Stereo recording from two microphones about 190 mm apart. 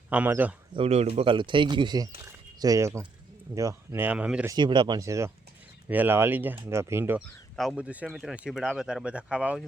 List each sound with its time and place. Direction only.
0.1 s speech: 10° right (ahead or behind)
0.7 s speech: 30° right (ahead or behind); by 4.5 s 5° right (ahead or behind)
4.5 s speech: 25° right (ahead or behind)
7.5 s speech: centre (ahead or behind)